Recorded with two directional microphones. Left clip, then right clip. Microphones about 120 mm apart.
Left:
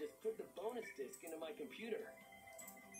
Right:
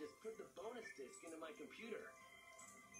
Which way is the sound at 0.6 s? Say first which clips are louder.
Left 6 dB; 35° left (ahead or behind).